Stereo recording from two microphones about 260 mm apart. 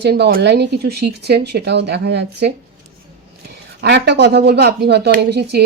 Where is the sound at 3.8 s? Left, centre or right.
Right.